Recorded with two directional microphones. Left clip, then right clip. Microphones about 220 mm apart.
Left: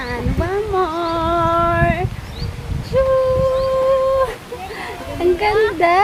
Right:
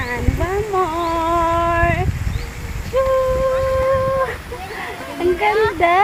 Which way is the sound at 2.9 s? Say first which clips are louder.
Left 1 dB; 5° left (ahead or behind).